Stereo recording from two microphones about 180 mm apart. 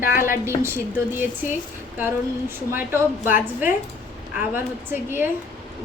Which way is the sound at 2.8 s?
15° right (ahead or behind).